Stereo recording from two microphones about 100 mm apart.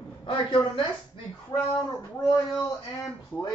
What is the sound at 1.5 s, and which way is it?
Speech, 40° left (ahead or behind).